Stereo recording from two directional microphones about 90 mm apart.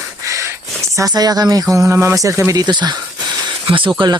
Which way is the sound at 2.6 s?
50° right (ahead or behind).